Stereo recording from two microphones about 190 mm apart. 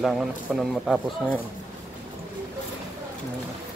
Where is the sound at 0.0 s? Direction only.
Centre (ahead or behind).